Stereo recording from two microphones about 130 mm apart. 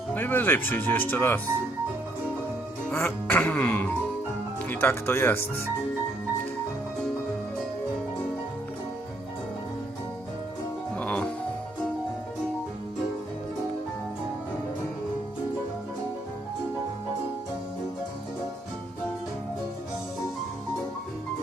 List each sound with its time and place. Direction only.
0.1 s speech: 15° left (ahead or behind)
2.9 s speech: 15° left (ahead or behind)
10.9 s music: 10° left (ahead or behind)